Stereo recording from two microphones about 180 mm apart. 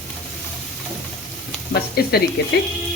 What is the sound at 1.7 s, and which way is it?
Speech, 60° left (ahead or behind).